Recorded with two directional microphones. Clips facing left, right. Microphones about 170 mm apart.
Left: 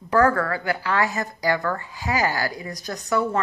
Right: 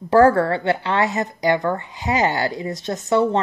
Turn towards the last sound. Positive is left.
turn(degrees=-25)  # may be behind; listen again after turning